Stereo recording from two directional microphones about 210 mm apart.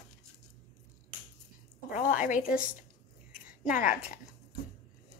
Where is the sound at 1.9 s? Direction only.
40° left (ahead or behind).